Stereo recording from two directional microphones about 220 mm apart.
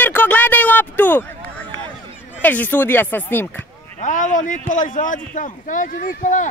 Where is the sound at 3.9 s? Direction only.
35° left (ahead or behind).